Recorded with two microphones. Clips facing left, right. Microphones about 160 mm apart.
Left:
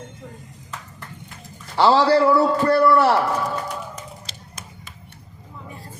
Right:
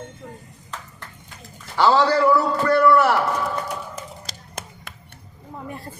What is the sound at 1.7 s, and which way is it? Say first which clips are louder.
A man's voice: left 2 dB; 30° left (ahead or behind).